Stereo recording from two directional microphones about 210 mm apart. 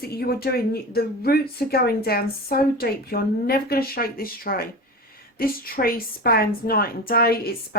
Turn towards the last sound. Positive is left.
turn(degrees=45)  # may be behind; listen again after turning